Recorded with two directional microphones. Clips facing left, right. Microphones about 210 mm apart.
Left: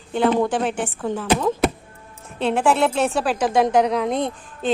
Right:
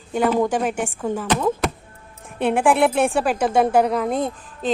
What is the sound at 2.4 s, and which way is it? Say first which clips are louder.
A woman's voice: right 1 dB; 15° right (ahead or behind).